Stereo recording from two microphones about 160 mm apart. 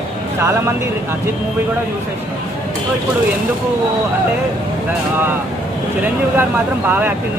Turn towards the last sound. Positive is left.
turn(degrees=-10)  # may be behind; listen again after turning